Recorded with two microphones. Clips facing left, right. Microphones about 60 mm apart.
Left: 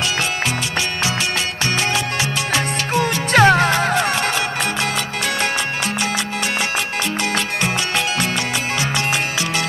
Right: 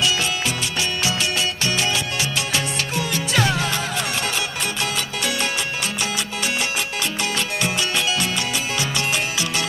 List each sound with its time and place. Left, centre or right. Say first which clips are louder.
2.5 s music: left 5 dB; left